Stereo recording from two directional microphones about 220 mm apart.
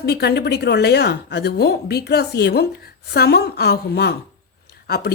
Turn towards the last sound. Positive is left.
turn(degrees=45)  # may be behind; listen again after turning